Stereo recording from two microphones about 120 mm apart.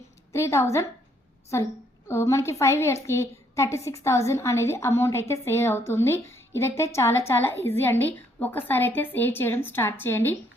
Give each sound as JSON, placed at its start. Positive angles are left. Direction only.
{"t": 0.3, "sound": "a woman's voice", "side_deg": 20}